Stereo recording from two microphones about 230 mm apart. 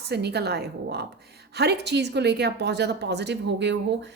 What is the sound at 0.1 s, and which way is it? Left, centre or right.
A woman's voice, right.